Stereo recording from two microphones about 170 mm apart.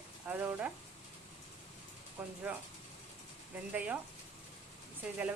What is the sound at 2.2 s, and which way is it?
Speech, 10° right (ahead or behind).